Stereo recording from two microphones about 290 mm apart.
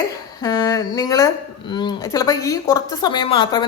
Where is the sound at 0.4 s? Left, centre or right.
Centre.